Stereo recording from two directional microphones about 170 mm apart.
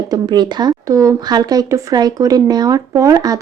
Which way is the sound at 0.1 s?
25° right (ahead or behind).